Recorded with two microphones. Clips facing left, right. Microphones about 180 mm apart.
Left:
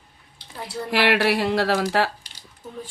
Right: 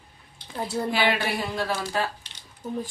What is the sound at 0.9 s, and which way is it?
Speech, 75° left (ahead or behind).